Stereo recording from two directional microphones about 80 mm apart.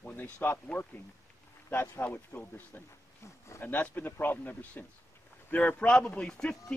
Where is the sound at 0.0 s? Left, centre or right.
Left.